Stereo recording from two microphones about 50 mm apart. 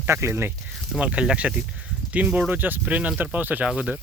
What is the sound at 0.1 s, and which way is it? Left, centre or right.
Speech, right.